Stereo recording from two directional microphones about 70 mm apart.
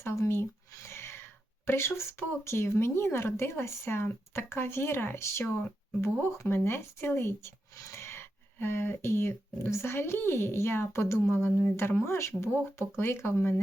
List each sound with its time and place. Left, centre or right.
0.0 s speech: left